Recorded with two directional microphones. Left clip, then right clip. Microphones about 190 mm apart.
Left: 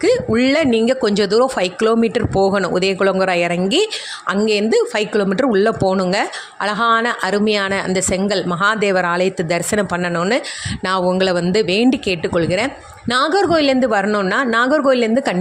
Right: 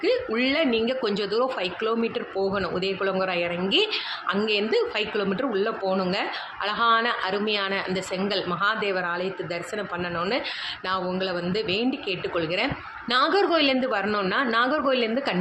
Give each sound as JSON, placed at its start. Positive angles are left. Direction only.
{"t": 0.0, "sound": "a woman's voice", "side_deg": 50}